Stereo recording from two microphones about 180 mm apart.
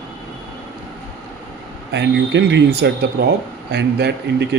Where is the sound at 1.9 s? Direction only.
75° right (ahead or behind).